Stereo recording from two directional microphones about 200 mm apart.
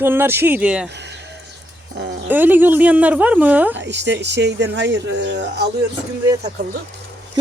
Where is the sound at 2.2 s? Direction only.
10° right (ahead or behind).